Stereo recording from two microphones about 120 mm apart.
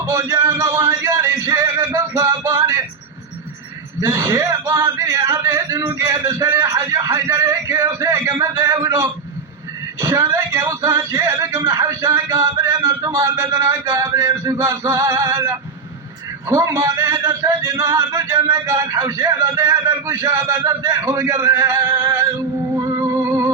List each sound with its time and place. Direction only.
0.0 s music: 25° right (ahead or behind)
4.0 s a man's voice: 25° right (ahead or behind)
12.6 s a sound: 25° right (ahead or behind)
13.6 s a man's voice: 25° right (ahead or behind)
22.0 s music: 20° right (ahead or behind)